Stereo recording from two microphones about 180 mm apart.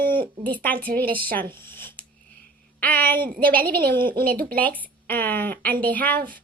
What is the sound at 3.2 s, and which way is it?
A woman's voice, 55° right (ahead or behind).